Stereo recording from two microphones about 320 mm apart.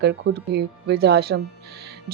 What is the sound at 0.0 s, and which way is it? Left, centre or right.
A woman's voice, right.